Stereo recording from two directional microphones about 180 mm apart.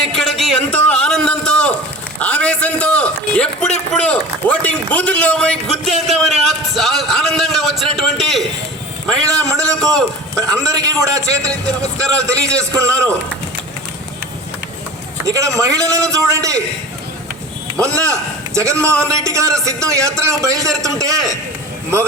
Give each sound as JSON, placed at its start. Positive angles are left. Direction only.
{"t": 0.0, "sound": "a sound", "side_deg": 0}
{"t": 3.9, "sound": "a man's voice", "side_deg": 5}
{"t": 9.5, "sound": "a man's voice", "side_deg": -20}
{"t": 15.2, "sound": "a man's voice", "side_deg": -20}
{"t": 17.7, "sound": "a man's voice", "side_deg": -15}